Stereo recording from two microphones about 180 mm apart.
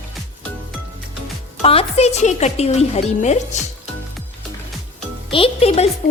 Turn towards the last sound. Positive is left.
turn(degrees=35)  # may be behind; listen again after turning